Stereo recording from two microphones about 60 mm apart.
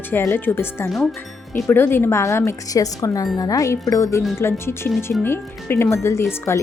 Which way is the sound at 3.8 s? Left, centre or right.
Left.